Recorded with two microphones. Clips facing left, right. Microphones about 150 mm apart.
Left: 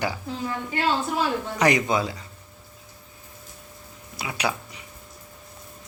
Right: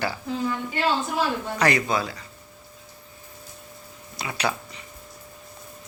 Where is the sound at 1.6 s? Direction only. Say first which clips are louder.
Left 2 dB; 20° left (ahead or behind).